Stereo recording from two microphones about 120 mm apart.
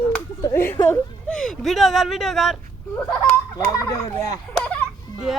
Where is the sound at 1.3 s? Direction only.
5° left (ahead or behind).